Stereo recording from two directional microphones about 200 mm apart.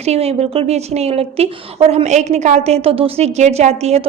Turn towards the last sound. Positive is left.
turn(degrees=-30)  # may be behind; listen again after turning